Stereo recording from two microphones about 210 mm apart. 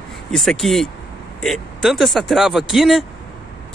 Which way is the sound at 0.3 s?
Centre (ahead or behind).